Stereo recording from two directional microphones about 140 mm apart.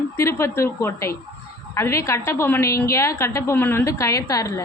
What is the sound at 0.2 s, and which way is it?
A woman's voice, 20° left (ahead or behind).